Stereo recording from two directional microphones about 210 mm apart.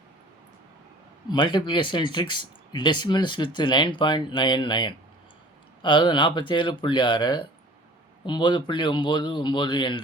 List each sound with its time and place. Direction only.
1.3 s speech: 20° left (ahead or behind)